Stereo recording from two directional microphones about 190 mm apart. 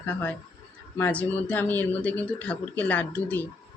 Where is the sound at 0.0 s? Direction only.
10° left (ahead or behind).